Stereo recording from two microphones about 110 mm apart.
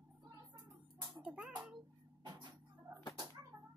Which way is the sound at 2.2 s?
40° right (ahead or behind).